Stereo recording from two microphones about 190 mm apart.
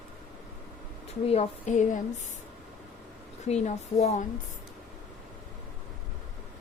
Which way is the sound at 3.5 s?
35° left (ahead or behind).